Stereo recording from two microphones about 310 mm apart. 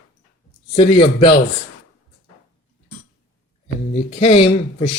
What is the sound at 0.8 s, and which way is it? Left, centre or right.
Speech, centre.